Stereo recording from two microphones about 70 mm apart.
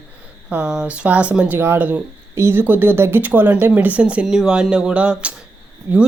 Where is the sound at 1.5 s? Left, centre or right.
Right.